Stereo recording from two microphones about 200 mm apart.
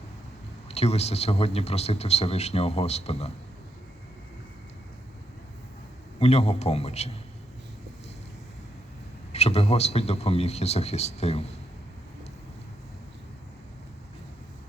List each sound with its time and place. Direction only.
0.7 s speech: 30° left (ahead or behind)
6.1 s speech: 30° left (ahead or behind)
9.3 s speech: 30° left (ahead or behind)